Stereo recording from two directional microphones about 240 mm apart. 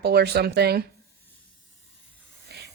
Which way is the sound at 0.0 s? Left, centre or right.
Right.